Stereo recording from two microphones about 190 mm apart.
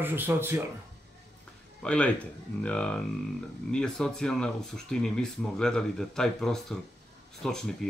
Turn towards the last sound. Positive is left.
turn(degrees=0)  # may be behind; listen again after turning